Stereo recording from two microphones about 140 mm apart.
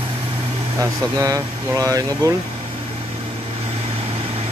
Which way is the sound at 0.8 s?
20° right (ahead or behind).